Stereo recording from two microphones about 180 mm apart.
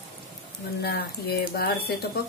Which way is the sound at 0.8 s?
60° left (ahead or behind).